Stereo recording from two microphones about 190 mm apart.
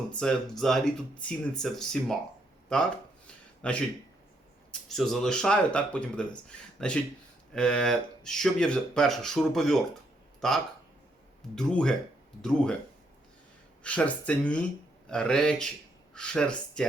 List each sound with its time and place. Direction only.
0.1 s speech: 5° left (ahead or behind)
3.6 s speech: 5° left (ahead or behind)
13.8 s speech: 5° left (ahead or behind)